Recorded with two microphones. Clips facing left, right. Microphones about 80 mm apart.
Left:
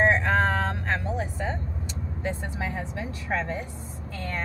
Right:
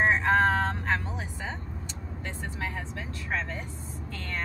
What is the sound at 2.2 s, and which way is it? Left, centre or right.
Vehicle, centre.